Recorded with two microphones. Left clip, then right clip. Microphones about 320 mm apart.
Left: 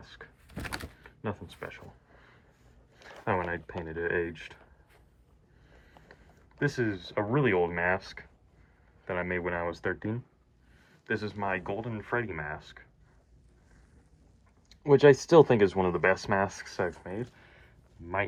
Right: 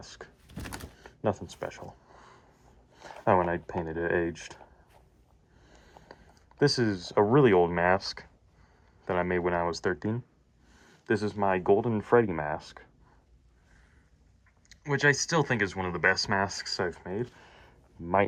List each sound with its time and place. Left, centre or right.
0.0 s a sound: centre
3.2 s speech: centre
6.6 s speech: centre
9.0 s speech: centre
15.0 s speech: centre